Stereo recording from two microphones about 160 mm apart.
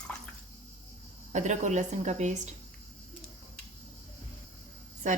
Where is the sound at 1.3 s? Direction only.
50° right (ahead or behind).